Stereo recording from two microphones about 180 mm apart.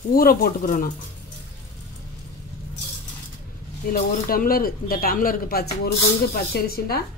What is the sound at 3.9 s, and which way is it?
Speech, 55° left (ahead or behind).